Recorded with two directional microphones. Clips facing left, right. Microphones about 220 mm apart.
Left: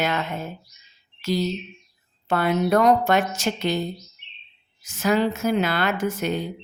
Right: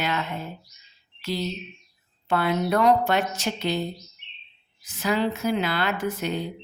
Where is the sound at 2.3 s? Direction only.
45° left (ahead or behind).